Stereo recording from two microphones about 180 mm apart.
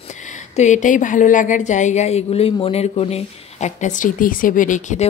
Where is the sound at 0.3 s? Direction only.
40° left (ahead or behind).